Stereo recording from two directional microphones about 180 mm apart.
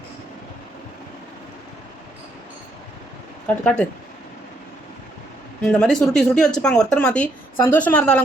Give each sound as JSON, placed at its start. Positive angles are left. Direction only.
{"t": 3.4, "sound": "speech", "side_deg": 5}
{"t": 5.6, "sound": "speech", "side_deg": 5}